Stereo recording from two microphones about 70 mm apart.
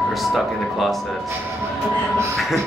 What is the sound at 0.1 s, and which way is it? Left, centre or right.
Speech, centre.